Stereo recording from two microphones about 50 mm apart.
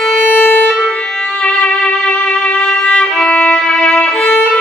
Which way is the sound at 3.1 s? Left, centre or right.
Centre.